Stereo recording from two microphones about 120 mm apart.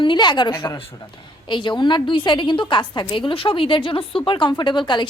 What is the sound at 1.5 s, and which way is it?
A woman's voice, 40° left (ahead or behind).